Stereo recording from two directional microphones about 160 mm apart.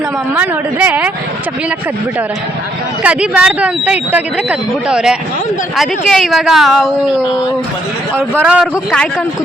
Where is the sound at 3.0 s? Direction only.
5° right (ahead or behind).